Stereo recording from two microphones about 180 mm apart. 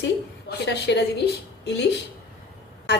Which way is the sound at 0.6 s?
70° left (ahead or behind).